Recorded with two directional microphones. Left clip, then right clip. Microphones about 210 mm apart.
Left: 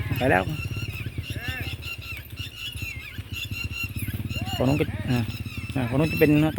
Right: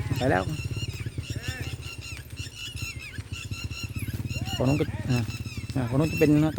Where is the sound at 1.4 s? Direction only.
30° right (ahead or behind).